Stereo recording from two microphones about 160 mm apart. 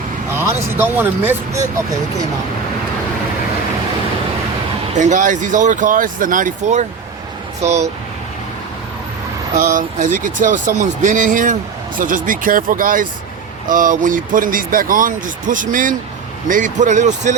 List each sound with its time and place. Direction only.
0.3 s speech: 15° right (ahead or behind)
4.9 s speech: 50° right (ahead or behind)
9.6 s speech: 55° right (ahead or behind)